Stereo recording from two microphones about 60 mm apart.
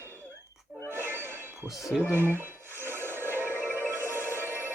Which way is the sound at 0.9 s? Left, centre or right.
Right.